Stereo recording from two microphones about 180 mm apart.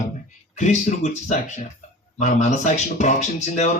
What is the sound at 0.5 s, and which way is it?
Speech, 40° left (ahead or behind).